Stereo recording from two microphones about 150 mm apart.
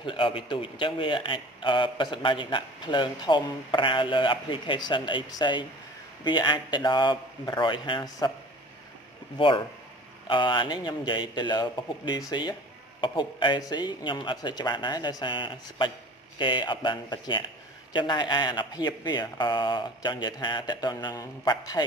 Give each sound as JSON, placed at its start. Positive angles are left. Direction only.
{"t": 0.0, "sound": "a man's voice", "side_deg": 35}
{"t": 9.4, "sound": "a man's voice", "side_deg": 35}